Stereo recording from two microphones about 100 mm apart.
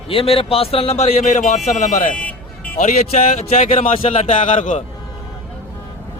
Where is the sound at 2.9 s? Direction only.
90° left.